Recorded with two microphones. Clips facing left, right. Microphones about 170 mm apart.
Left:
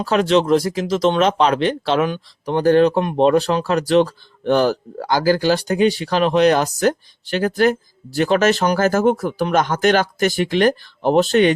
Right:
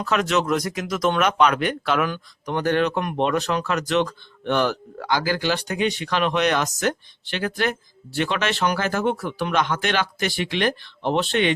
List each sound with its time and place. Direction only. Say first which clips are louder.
0.0 s speech: left 6 dB; 30° left (ahead or behind)
2.6 s speech: left 8 dB; 35° left (ahead or behind)